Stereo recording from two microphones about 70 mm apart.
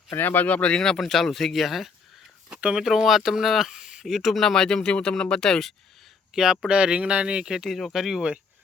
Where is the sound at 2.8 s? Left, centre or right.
Centre.